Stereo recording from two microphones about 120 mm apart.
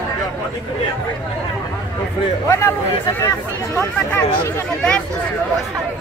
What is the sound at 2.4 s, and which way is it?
A man's voice, 25° left (ahead or behind).